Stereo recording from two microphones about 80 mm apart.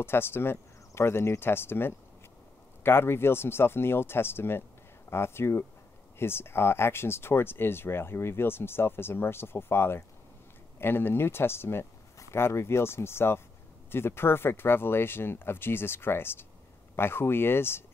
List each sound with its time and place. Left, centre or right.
0.0 s speech: left